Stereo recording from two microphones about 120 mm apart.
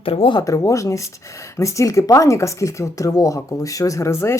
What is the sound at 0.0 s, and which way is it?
Speech, 50° left (ahead or behind).